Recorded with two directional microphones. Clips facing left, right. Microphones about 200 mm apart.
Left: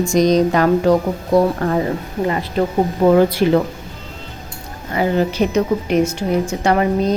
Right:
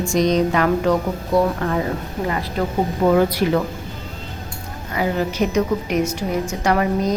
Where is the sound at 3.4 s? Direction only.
30° left (ahead or behind).